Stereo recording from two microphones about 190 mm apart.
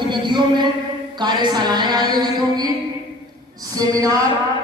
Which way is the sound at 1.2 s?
25° right (ahead or behind).